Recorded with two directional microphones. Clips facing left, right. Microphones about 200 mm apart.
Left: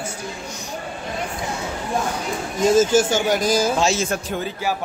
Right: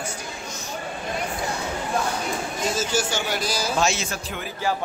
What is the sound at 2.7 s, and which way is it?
Speech, 50° left (ahead or behind).